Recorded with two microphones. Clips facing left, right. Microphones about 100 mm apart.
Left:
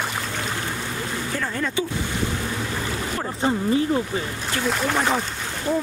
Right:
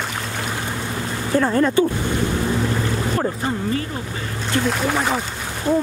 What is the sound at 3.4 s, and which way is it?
Speech, 20° left (ahead or behind).